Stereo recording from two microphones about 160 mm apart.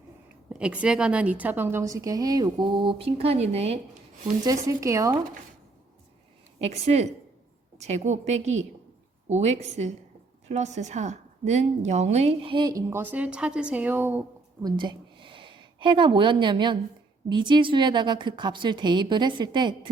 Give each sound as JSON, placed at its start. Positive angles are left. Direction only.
{"t": 0.6, "sound": "a woman's voice", "side_deg": -5}
{"t": 4.3, "sound": "a woman's voice", "side_deg": -20}
{"t": 6.6, "sound": "a woman's voice", "side_deg": -40}
{"t": 14.6, "sound": "a woman's voice", "side_deg": -30}